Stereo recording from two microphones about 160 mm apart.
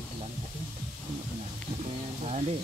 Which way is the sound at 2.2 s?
45° right (ahead or behind).